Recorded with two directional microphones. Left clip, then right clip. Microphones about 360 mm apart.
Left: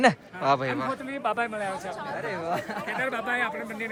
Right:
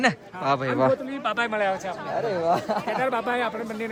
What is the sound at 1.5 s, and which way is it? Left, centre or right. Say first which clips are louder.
Speech: right 6 dB; right.